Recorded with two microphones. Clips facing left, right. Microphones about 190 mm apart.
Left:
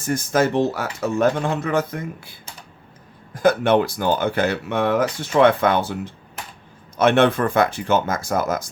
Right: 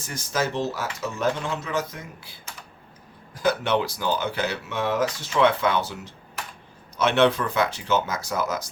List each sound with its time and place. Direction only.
0.0 s speech: 50° left (ahead or behind)
3.3 s speech: 50° left (ahead or behind)